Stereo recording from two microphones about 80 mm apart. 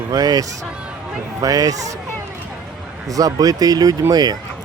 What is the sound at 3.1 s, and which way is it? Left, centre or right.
Speech, right.